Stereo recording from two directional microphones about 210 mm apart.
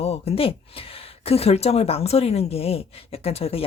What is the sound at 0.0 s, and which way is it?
Speech, 30° left (ahead or behind).